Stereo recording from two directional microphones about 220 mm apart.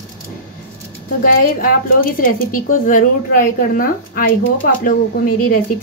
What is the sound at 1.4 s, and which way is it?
A woman's voice, 40° left (ahead or behind).